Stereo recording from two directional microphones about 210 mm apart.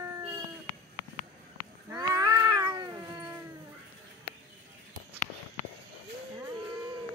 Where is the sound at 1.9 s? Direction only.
15° right (ahead or behind).